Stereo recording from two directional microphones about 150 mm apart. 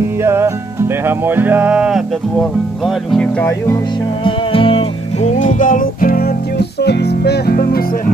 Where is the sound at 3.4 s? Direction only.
20° left (ahead or behind).